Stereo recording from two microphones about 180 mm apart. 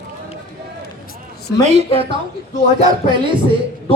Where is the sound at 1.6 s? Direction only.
35° right (ahead or behind).